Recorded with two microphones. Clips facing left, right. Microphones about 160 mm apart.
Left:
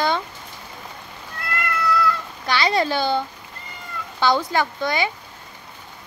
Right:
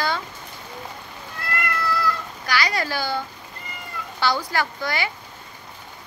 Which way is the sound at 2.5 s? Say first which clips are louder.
Left 4 dB; 25° left (ahead or behind).